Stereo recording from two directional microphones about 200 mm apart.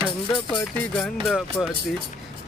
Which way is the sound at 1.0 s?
Centre (ahead or behind).